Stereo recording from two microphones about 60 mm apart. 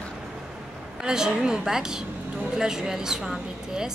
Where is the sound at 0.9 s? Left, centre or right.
Centre.